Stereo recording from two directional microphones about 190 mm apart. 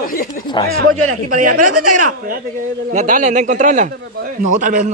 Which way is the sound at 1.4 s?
45° right (ahead or behind).